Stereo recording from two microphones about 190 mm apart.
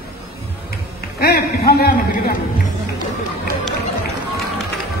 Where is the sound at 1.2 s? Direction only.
55° left (ahead or behind).